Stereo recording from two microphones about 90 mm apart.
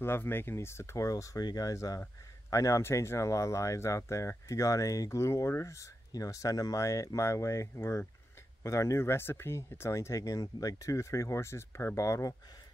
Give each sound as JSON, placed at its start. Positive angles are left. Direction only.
{"t": 0.0, "sound": "speech", "side_deg": 25}